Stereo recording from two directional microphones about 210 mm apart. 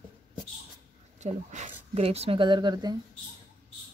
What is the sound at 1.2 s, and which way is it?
Speech, 35° right (ahead or behind).